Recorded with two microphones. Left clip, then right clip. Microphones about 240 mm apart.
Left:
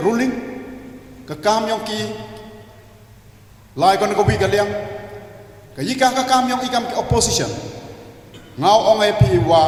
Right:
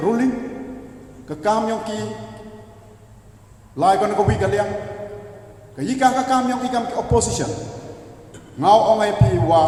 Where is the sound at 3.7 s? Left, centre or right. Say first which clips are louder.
Left 1 dB; left.